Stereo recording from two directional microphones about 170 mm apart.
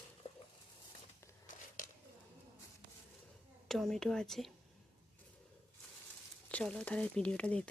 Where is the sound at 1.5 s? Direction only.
50° left (ahead or behind).